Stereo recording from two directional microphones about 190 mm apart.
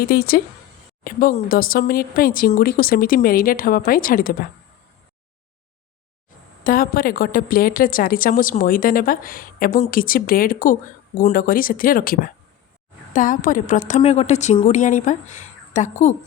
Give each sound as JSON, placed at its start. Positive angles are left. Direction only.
{"t": 0.1, "sound": "a woman's voice", "side_deg": 55}
{"t": 1.1, "sound": "a sound", "side_deg": 45}
{"t": 1.5, "sound": "a woman's voice", "side_deg": 50}
{"t": 6.7, "sound": "a woman's voice", "side_deg": 50}